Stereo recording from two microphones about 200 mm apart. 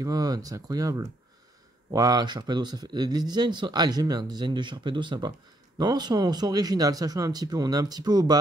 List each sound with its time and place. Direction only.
0.0 s speech: 20° right (ahead or behind)